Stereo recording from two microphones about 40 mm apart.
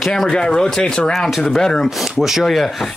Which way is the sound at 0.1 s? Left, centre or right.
Centre.